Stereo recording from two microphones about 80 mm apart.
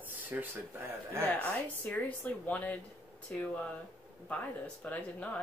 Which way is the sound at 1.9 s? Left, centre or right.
Left.